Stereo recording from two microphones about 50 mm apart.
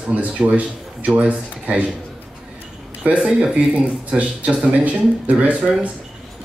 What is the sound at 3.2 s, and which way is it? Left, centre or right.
Speech, centre.